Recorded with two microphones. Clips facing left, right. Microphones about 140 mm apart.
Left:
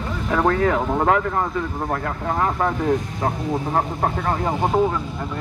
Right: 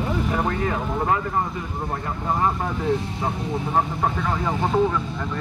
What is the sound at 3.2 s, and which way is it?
A man's voice, 60° left (ahead or behind).